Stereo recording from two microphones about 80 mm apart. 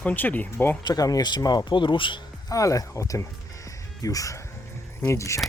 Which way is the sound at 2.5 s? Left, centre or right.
Left.